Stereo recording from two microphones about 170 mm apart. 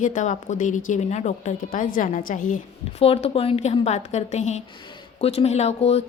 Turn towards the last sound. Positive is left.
turn(degrees=40)  # may be behind; listen again after turning